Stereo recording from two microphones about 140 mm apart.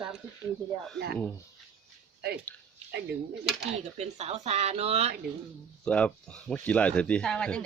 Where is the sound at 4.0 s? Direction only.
50° right (ahead or behind).